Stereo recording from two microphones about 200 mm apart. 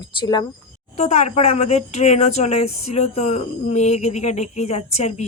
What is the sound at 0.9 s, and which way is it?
Speech, 35° left (ahead or behind).